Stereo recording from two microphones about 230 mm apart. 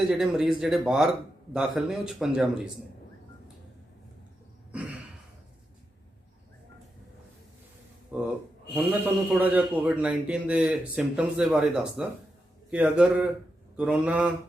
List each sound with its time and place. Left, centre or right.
0.1 s speech: centre
4.7 s a sound: centre
8.1 s speech: centre